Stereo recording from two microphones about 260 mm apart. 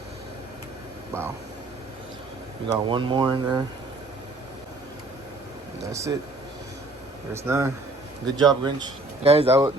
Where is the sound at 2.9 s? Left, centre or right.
Centre.